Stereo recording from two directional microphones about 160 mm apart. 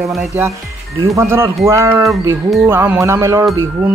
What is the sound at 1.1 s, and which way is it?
Speech, 15° right (ahead or behind).